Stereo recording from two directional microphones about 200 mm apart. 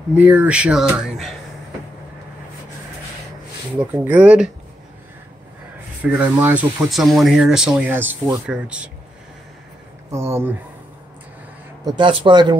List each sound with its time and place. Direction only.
0.1 s speech: 10° right (ahead or behind)
3.7 s speech: 10° right (ahead or behind)
6.0 s speech: 10° right (ahead or behind)
10.1 s speech: 15° right (ahead or behind)
11.8 s speech: 25° right (ahead or behind)